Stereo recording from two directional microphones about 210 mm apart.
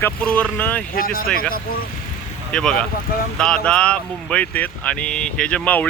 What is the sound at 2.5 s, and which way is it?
Speech, 5° left (ahead or behind).